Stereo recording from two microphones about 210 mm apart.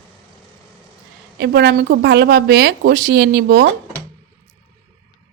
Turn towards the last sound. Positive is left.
turn(degrees=-50)  # may be behind; listen again after turning